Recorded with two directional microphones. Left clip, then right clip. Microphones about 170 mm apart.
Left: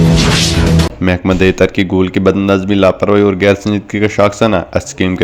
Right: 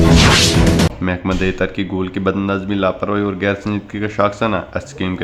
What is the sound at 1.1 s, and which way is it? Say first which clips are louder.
Speech: left 7 dB; 35° left (ahead or behind).